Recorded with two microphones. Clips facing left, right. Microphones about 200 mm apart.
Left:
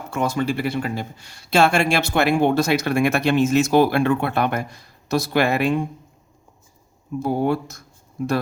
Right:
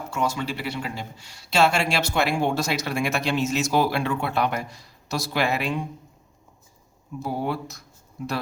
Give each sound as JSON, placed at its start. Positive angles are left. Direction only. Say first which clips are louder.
{"t": 0.1, "sound": "speech", "louder": "left 5 dB", "side_deg": 55}
{"t": 7.2, "sound": "speech", "louder": "left 7 dB", "side_deg": 50}